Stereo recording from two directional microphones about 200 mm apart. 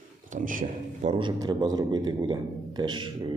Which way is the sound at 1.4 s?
20° right (ahead or behind).